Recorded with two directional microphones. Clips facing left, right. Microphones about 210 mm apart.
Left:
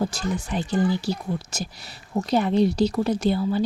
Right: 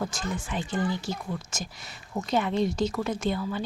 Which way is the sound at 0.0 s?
35° left (ahead or behind).